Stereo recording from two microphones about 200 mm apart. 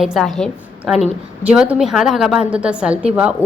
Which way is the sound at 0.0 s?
Centre (ahead or behind).